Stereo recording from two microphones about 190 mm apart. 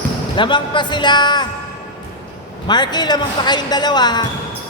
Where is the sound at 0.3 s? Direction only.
25° left (ahead or behind).